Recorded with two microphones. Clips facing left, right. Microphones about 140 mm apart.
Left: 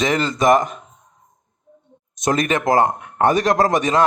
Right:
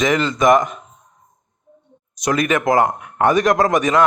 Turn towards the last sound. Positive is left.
turn(degrees=30)  # may be behind; listen again after turning